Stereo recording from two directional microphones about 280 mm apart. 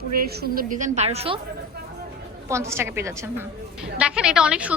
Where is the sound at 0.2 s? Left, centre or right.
Right.